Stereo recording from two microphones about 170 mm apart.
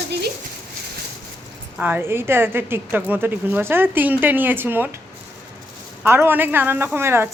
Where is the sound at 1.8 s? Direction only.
10° right (ahead or behind).